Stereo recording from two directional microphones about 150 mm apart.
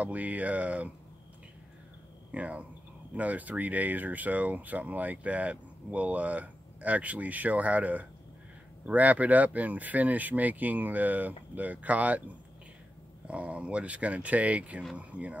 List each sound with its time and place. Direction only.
0.0 s speech: 10° right (ahead or behind)
2.3 s speech: 10° right (ahead or behind)
13.3 s speech: 10° right (ahead or behind)